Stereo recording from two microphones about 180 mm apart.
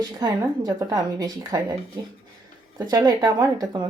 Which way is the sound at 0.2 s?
20° right (ahead or behind).